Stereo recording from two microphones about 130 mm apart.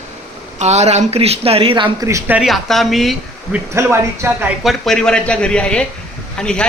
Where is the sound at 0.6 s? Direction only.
60° right (ahead or behind); by 1.9 s 40° right (ahead or behind).